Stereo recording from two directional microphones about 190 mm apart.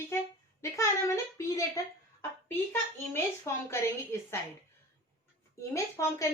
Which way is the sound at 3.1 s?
15° left (ahead or behind).